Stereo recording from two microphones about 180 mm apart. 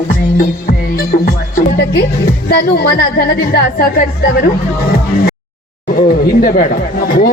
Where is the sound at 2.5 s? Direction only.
60° left (ahead or behind).